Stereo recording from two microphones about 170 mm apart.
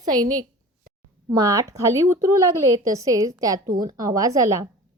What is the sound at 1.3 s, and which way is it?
A woman's voice, 20° right (ahead or behind).